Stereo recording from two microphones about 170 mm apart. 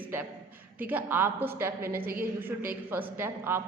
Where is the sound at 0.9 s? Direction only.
10° right (ahead or behind).